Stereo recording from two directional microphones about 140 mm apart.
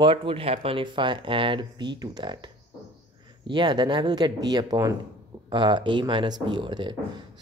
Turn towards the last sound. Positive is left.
turn(degrees=-35)  # may be behind; listen again after turning